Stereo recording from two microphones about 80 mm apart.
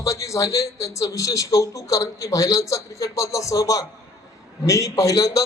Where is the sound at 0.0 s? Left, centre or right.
Left.